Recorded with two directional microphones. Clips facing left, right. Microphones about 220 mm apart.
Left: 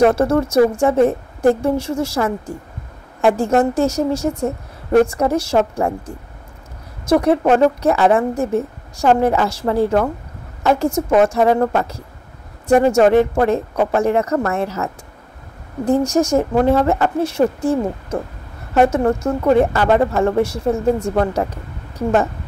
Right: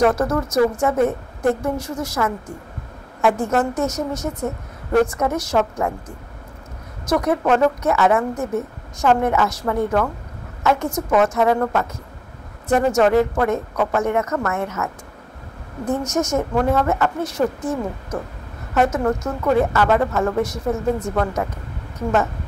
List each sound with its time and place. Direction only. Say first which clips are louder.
0.0 s a woman's voice: left 4 dB; 30° left (ahead or behind)
7.1 s a woman's voice: left 4 dB; 30° left (ahead or behind)
16.3 s a woman's voice: left 3 dB; 30° left (ahead or behind)